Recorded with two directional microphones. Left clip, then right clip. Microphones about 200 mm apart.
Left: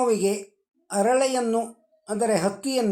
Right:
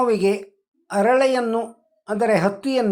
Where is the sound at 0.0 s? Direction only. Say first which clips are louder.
Right 4 dB; 15° right (ahead or behind).